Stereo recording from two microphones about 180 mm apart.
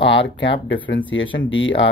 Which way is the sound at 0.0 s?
90° left.